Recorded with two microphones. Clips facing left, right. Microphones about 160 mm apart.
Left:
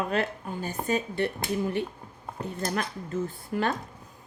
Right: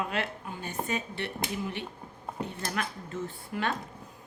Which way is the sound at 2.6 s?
40° left (ahead or behind).